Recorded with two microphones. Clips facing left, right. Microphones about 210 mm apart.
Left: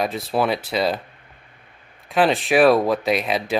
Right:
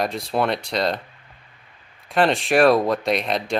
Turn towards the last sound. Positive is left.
turn(degrees=5)  # may be behind; listen again after turning